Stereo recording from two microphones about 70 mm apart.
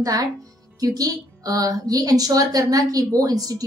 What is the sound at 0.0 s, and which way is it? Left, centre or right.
A woman's voice, right.